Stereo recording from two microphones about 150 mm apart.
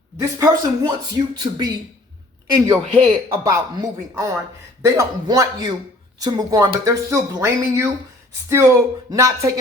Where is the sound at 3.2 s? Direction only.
20° right (ahead or behind).